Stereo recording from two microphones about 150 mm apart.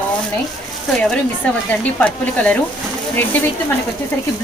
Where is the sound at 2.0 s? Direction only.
10° left (ahead or behind).